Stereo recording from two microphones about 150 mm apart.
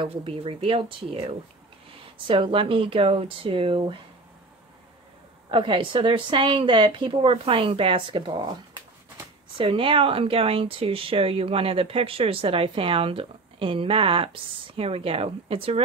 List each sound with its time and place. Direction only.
0.0 s speech: 35° right (ahead or behind)
5.5 s speech: 35° right (ahead or behind)
9.6 s speech: 35° right (ahead or behind)